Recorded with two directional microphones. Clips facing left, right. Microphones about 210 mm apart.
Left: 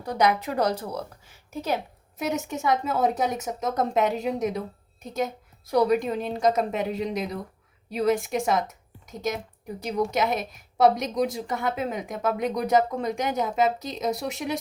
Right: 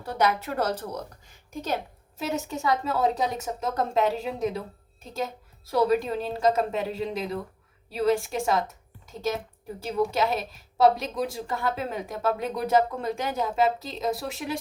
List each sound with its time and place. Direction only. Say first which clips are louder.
0.0 s a woman's voice: left 2 dB; 15° left (ahead or behind)